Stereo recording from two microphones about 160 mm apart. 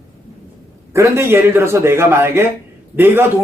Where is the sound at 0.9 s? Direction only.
15° right (ahead or behind).